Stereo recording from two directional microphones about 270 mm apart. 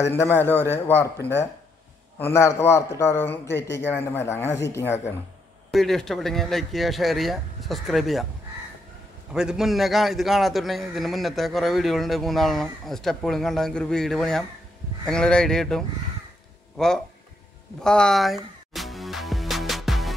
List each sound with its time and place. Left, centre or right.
0.1 s a man's voice: centre
9.3 s a man's voice: centre
17.8 s music: centre